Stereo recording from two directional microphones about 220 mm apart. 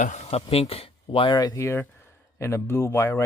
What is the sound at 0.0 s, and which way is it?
Speech, 30° left (ahead or behind).